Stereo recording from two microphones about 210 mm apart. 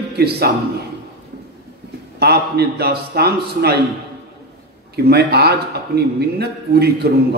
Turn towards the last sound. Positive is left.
turn(degrees=-50)  # may be behind; listen again after turning